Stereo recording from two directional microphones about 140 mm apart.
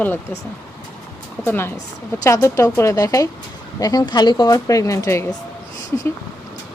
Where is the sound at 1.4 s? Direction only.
15° left (ahead or behind).